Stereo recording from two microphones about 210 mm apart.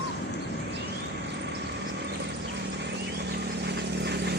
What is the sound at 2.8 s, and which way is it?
Vehicle, 55° right (ahead or behind).